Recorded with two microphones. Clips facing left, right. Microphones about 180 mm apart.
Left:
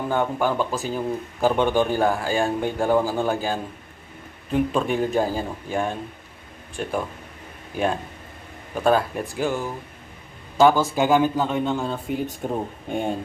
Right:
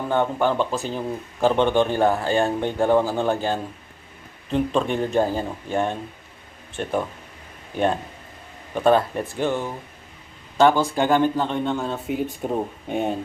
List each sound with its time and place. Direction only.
0.1 s a man's voice: 5° left (ahead or behind)
8.7 s a man's voice: 5° left (ahead or behind)